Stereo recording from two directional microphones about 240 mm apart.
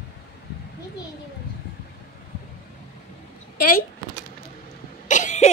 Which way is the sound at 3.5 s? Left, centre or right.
Left.